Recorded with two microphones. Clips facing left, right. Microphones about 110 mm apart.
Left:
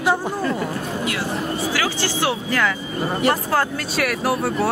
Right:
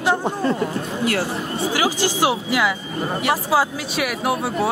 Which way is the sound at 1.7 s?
15° right (ahead or behind).